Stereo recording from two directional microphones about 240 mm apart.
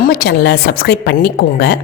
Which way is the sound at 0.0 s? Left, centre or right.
Left.